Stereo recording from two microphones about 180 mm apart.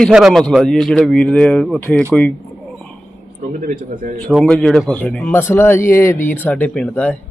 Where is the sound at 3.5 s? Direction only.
45° right (ahead or behind).